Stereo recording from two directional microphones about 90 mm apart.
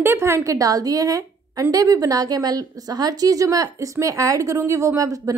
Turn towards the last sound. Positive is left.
turn(degrees=-40)  # may be behind; listen again after turning